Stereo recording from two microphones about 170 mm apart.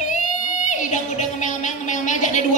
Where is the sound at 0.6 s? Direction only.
45° left (ahead or behind).